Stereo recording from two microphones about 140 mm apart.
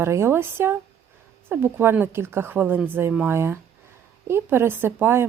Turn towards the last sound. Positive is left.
turn(degrees=-15)  # may be behind; listen again after turning